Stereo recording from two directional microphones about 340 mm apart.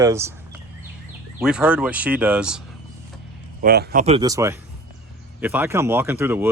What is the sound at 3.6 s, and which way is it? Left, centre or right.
Speech, right.